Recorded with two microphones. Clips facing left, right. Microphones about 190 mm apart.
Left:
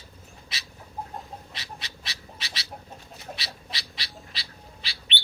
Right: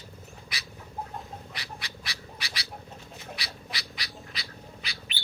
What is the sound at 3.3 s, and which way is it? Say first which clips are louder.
Squawk: even; 25° left (ahead or behind).